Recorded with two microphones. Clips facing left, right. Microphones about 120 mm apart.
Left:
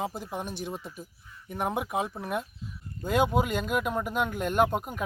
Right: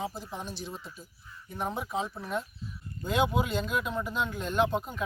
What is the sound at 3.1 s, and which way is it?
Speech, 45° left (ahead or behind).